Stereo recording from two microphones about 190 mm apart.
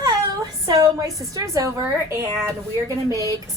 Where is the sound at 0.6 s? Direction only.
15° right (ahead or behind).